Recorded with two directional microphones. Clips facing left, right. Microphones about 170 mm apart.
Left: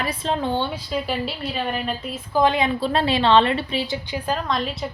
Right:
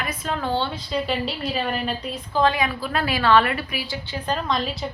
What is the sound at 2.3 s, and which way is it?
Speech, 20° left (ahead or behind).